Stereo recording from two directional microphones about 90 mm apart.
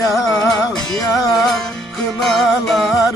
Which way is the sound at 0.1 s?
Centre (ahead or behind).